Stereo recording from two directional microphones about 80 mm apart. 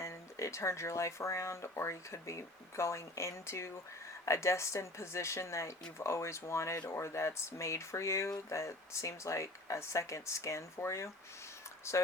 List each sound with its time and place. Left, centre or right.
0.0 s speech: left